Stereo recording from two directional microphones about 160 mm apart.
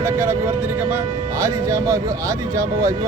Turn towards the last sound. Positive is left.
turn(degrees=-20)  # may be behind; listen again after turning